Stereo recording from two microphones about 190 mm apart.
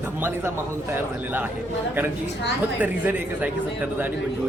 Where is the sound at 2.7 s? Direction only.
10° right (ahead or behind).